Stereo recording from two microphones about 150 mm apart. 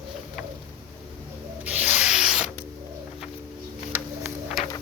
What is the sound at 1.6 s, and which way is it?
Rub, 10° right (ahead or behind).